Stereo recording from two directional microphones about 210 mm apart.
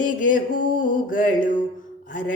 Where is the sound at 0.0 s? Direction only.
40° left (ahead or behind).